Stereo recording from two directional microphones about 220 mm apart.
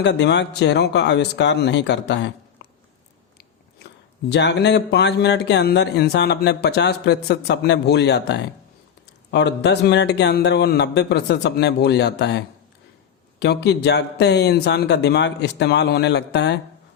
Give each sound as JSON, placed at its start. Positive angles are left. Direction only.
{"t": 0.0, "sound": "speech", "side_deg": 50}
{"t": 4.3, "sound": "speech", "side_deg": 50}
{"t": 13.4, "sound": "speech", "side_deg": 50}